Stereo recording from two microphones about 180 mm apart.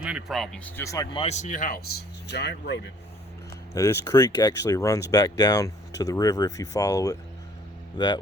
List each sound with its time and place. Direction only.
0.0 s speech: 5° right (ahead or behind); by 1.0 s 15° left (ahead or behind)
1.1 s speech: 35° left (ahead or behind)
2.2 s speech: 70° left (ahead or behind)
3.8 s speech: 15° left (ahead or behind)